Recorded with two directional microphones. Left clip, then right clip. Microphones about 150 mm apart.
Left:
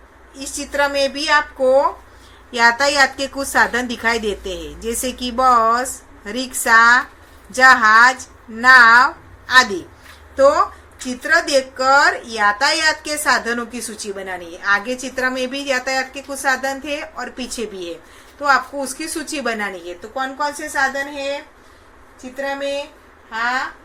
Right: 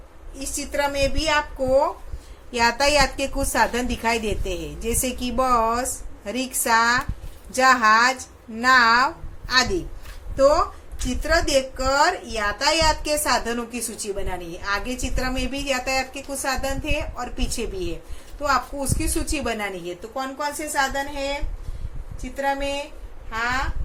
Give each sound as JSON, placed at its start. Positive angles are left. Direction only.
{"t": 0.7, "sound": "a woman's voice", "side_deg": -20}
{"t": 10.3, "sound": "a woman's voice", "side_deg": -10}
{"t": 22.4, "sound": "a woman's voice", "side_deg": -30}